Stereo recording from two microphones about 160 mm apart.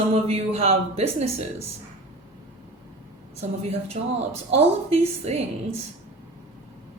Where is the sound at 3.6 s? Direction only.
40° right (ahead or behind).